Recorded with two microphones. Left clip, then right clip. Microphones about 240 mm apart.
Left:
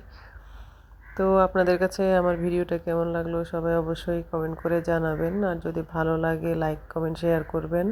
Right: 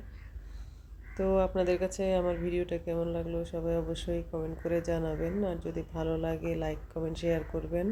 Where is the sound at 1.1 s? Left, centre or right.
Centre.